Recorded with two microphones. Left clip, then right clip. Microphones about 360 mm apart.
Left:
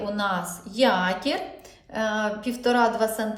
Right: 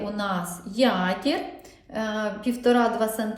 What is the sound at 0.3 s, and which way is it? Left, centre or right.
A woman's voice, centre.